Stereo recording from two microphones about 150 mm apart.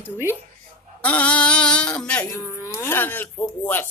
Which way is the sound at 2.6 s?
20° left (ahead or behind).